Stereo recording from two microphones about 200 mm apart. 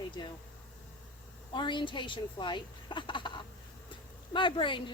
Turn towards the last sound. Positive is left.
turn(degrees=25)  # may be behind; listen again after turning